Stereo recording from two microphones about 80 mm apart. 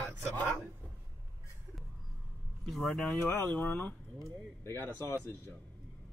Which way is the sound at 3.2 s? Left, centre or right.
Left.